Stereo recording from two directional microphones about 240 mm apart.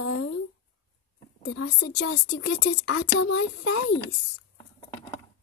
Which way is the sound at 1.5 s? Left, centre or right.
Left.